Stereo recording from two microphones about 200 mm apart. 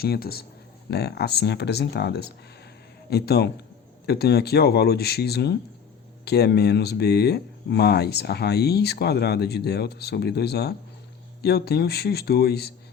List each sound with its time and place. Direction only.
0.0 s speech: 50° left (ahead or behind)